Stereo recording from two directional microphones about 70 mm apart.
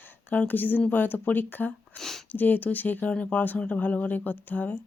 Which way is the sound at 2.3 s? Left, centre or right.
Left.